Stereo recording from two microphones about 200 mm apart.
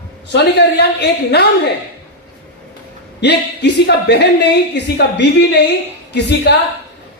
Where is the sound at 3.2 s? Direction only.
55° left (ahead or behind).